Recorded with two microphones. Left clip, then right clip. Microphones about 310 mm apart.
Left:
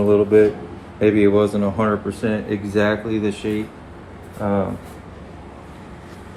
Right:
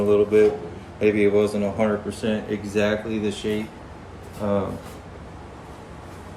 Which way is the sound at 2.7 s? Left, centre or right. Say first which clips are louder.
Left 3 dB; centre.